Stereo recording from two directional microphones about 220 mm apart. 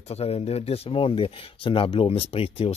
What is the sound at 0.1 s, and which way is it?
Speech, 25° left (ahead or behind).